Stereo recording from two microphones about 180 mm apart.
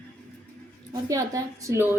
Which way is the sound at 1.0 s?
20° right (ahead or behind).